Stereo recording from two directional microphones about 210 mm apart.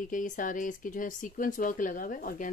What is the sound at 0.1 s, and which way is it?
Speech, 40° left (ahead or behind).